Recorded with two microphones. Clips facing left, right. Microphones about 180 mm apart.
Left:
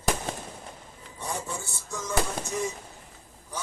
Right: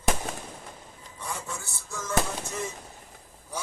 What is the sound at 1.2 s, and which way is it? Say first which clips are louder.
Music: left 3 dB; 30° left (ahead or behind).